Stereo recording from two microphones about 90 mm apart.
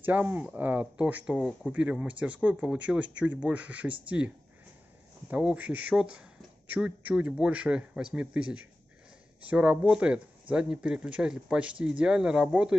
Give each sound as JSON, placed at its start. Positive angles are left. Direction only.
{"t": 0.0, "sound": "speech", "side_deg": -20}
{"t": 5.3, "sound": "speech", "side_deg": -15}